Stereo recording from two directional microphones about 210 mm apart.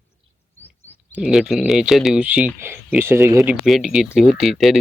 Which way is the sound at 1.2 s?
Centre (ahead or behind).